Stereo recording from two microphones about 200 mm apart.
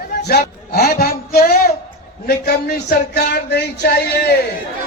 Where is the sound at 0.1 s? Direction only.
55° left (ahead or behind).